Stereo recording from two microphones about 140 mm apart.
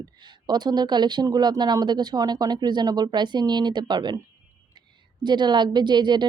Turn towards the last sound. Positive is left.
turn(degrees=-30)  # may be behind; listen again after turning